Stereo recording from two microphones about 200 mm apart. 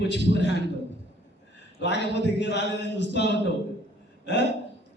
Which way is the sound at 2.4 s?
60° left (ahead or behind).